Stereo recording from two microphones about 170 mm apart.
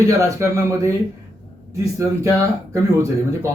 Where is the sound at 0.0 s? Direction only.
20° right (ahead or behind).